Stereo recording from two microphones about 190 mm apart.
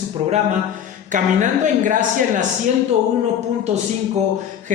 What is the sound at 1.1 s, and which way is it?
A woman's voice, 40° right (ahead or behind).